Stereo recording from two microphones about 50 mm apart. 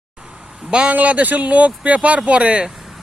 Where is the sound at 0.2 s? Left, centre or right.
Centre.